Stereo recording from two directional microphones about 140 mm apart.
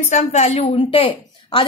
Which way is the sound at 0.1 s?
50° left (ahead or behind).